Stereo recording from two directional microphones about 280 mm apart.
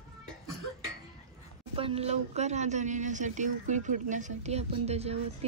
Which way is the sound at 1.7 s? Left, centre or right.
Centre.